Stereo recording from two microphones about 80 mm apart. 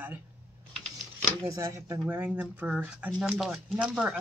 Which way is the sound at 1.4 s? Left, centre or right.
Right.